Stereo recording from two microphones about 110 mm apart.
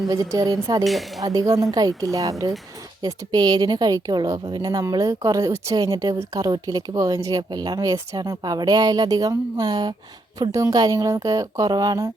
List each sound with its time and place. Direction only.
0.1 s a woman's voice: 30° right (ahead or behind)